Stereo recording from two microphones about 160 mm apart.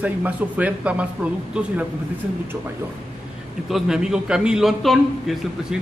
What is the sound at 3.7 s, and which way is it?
A man's voice, centre (ahead or behind).